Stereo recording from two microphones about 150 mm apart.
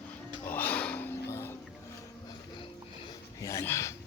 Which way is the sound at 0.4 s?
10° left (ahead or behind).